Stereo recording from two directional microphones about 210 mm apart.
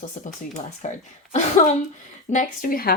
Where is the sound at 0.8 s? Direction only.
35° left (ahead or behind).